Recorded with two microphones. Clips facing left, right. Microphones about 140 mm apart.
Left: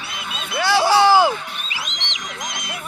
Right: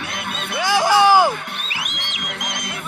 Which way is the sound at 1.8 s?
60° right (ahead or behind).